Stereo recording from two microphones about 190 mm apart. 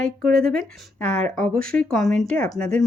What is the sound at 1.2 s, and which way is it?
Speech, 40° right (ahead or behind).